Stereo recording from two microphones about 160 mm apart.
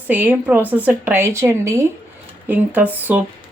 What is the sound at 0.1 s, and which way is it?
Speech, 10° right (ahead or behind).